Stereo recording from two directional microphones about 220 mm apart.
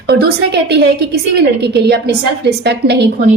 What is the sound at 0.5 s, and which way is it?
A woman's voice, 50° right (ahead or behind).